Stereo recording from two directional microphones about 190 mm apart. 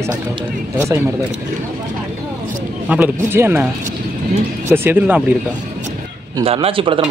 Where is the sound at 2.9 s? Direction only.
10° right (ahead or behind).